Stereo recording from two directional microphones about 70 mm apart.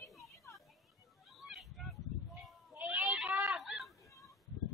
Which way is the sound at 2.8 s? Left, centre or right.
Centre.